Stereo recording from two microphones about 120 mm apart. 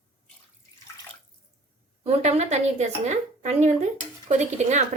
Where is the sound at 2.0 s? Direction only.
65° right (ahead or behind).